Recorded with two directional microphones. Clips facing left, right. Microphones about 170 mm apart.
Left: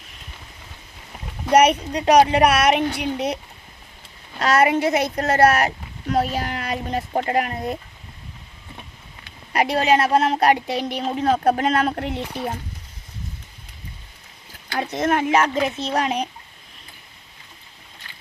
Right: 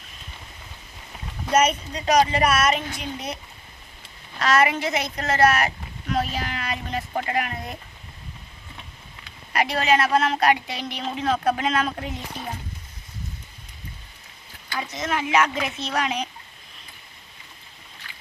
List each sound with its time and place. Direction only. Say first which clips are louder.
1.5 s speech: left 5 dB; 65° left (ahead or behind)
4.7 s speech: left 7 dB; 60° left (ahead or behind)
5.5 s a woman's voice: left 3 dB; 40° left (ahead or behind)
9.5 s a woman's voice: left 3 dB; 35° left (ahead or behind)
11.9 s speech: left 6 dB; 65° left (ahead or behind)
14.7 s speech: left 6 dB; 60° left (ahead or behind)
15.4 s a woman's voice: left 3 dB; 35° left (ahead or behind)